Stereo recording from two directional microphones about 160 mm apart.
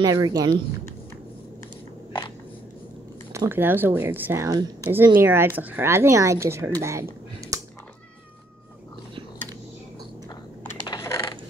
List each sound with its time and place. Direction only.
0.0 s speech: 20° right (ahead or behind)
3.3 s speech: 15° right (ahead or behind)
10.9 s a sound: 25° left (ahead or behind)